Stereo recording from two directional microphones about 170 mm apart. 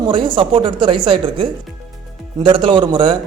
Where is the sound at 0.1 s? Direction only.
30° right (ahead or behind).